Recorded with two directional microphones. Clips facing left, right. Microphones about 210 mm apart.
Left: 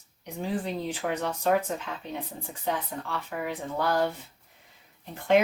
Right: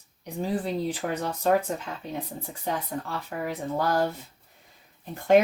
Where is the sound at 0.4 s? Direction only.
35° right (ahead or behind).